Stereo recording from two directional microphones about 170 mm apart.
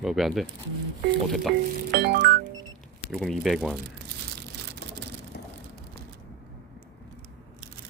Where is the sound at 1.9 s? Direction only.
75° right (ahead or behind).